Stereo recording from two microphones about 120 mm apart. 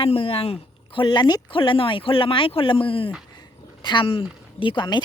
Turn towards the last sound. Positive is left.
turn(degrees=40)  # may be behind; listen again after turning